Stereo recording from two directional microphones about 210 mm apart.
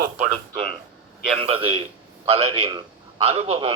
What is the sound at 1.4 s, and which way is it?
A man's voice, 25° right (ahead or behind).